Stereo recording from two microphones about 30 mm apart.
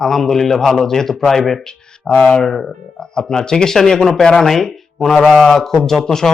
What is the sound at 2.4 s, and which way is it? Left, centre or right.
Speech, centre.